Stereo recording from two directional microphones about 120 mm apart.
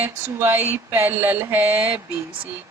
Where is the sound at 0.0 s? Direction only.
15° right (ahead or behind).